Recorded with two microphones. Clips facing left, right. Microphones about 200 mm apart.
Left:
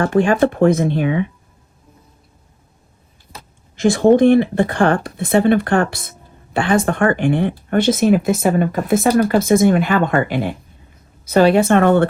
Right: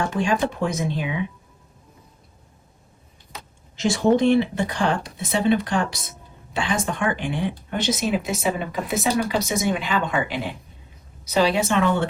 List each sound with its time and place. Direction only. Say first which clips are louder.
0.0 s speech: left 8 dB; 55° left (ahead or behind)
3.8 s speech: left 7 dB; 50° left (ahead or behind)